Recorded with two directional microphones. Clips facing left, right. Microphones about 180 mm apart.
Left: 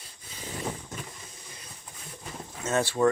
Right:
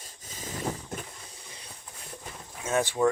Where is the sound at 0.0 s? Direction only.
45° right (ahead or behind).